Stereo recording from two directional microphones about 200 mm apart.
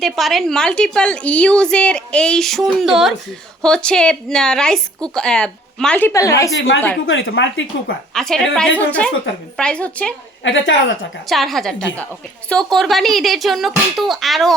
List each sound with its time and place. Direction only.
0.0 s a woman's voice: centre (ahead or behind); by 6.5 s 15° left (ahead or behind)
7.1 s speech: 65° left (ahead or behind)
8.1 s a woman's voice: centre (ahead or behind)
10.4 s speech: 65° left (ahead or behind)
11.3 s a woman's voice: centre (ahead or behind)